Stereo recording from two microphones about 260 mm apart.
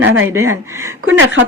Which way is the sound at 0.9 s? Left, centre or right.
Right.